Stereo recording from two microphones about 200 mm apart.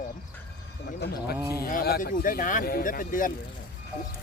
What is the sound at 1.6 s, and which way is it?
Speech, 50° left (ahead or behind).